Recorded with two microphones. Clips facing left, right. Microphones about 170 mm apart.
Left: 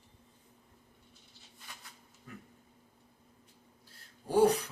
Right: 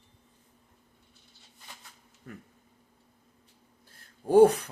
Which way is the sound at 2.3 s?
55° right (ahead or behind).